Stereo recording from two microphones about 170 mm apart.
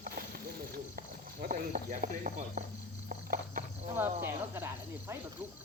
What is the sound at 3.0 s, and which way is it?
Walk, 50° right (ahead or behind).